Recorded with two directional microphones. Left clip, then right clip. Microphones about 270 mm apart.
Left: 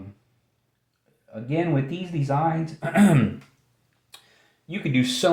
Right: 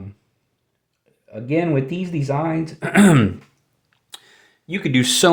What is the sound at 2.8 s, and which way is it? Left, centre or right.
Speech, right.